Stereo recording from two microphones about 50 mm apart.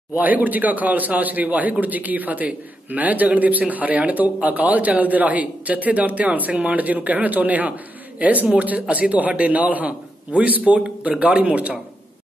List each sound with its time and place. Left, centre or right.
0.2 s a man's voice: right